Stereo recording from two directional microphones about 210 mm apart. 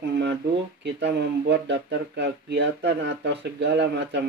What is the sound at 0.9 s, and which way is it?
Speech, 50° right (ahead or behind).